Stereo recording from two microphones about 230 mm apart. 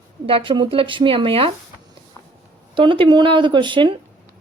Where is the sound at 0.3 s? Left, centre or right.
Right.